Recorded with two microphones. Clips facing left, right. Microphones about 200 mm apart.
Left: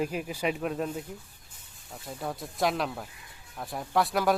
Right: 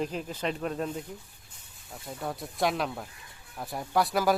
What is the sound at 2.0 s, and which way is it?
Speech, centre (ahead or behind).